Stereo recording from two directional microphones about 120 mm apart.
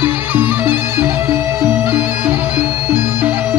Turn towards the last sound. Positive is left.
turn(degrees=-20)  # may be behind; listen again after turning